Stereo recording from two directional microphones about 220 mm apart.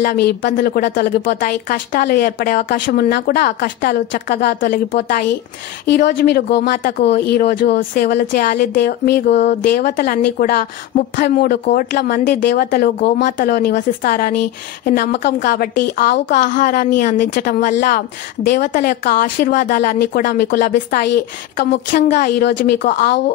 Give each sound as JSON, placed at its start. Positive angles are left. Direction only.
{"t": 0.0, "sound": "speech", "side_deg": 45}
{"t": 3.4, "sound": "speech", "side_deg": 35}